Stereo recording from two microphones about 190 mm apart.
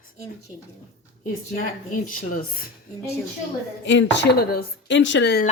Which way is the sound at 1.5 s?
45° left (ahead or behind).